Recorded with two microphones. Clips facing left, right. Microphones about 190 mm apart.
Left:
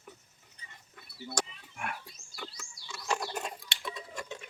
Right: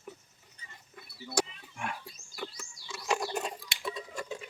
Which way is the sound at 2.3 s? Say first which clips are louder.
Right 4 dB; 5° right (ahead or behind).